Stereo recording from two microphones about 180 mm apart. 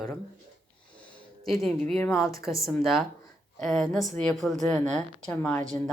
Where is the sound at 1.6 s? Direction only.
Centre (ahead or behind).